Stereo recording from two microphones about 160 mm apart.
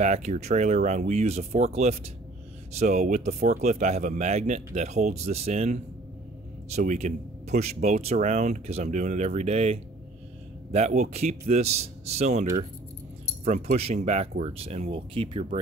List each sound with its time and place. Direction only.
0.0 s speech: 45° right (ahead or behind)